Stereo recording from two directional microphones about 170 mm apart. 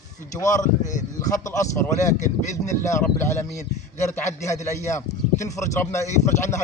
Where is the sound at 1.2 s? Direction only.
20° left (ahead or behind).